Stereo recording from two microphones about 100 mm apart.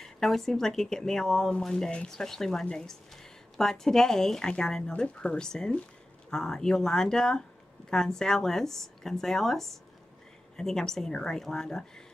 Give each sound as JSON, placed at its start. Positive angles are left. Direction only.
{"t": 0.0, "sound": "speech", "side_deg": 5}